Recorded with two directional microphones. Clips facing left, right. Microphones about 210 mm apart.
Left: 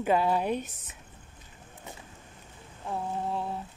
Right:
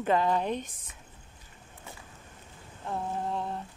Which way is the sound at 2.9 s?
5° left (ahead or behind).